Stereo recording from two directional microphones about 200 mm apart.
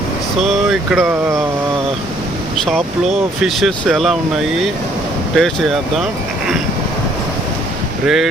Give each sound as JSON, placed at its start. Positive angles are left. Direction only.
{"t": 0.4, "sound": "speech", "side_deg": 0}
{"t": 3.4, "sound": "speech", "side_deg": 0}
{"t": 5.3, "sound": "speech", "side_deg": 0}
{"t": 8.0, "sound": "speech", "side_deg": 0}